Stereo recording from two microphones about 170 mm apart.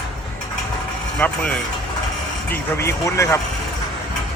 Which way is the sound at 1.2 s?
10° left (ahead or behind).